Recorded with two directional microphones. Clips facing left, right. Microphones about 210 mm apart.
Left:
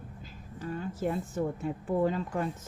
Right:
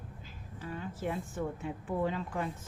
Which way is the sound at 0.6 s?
40° left (ahead or behind).